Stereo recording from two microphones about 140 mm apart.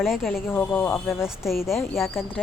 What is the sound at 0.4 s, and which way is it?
A woman's voice, 15° left (ahead or behind).